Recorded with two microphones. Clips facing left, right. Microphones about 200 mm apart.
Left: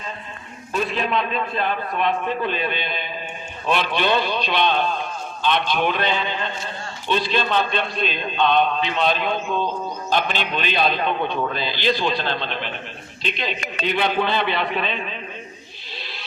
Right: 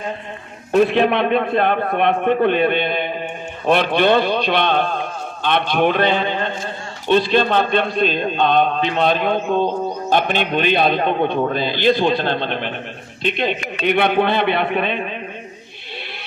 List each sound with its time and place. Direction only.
0.7 s a man's voice: 65° right (ahead or behind)